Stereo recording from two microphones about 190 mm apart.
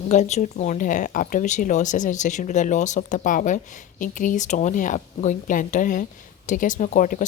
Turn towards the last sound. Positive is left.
turn(degrees=45)  # may be behind; listen again after turning